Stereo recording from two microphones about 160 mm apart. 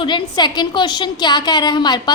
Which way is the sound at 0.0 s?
30° left (ahead or behind).